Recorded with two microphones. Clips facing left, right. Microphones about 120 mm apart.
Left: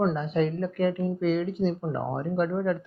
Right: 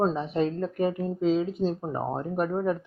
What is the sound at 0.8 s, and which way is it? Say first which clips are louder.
Speech: even; 40° right (ahead or behind).